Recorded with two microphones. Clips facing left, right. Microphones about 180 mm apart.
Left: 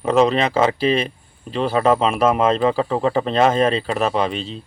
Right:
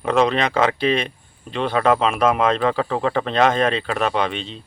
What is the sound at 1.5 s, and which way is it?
Speech, 5° left (ahead or behind).